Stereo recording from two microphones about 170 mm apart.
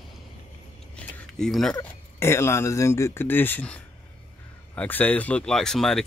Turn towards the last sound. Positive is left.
turn(degrees=5)  # may be behind; listen again after turning